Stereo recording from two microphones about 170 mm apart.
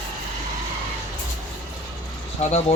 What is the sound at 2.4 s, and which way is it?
Speech, 40° left (ahead or behind).